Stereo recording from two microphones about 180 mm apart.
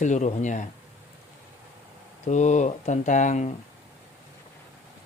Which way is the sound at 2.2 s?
40° left (ahead or behind).